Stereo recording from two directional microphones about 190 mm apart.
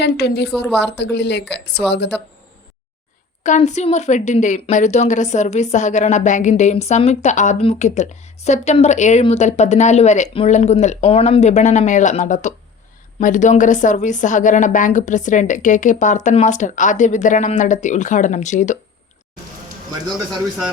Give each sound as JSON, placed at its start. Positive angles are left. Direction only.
{"t": 0.0, "sound": "speech", "side_deg": 60}
{"t": 3.4, "sound": "a woman's voice", "side_deg": 40}